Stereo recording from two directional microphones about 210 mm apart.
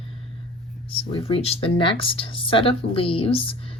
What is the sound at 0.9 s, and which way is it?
Speech, 25° left (ahead or behind).